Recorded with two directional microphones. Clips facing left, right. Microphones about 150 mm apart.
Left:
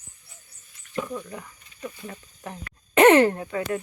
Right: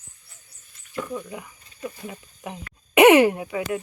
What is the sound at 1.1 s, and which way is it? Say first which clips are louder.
Speech: right 2 dB; 10° right (ahead or behind).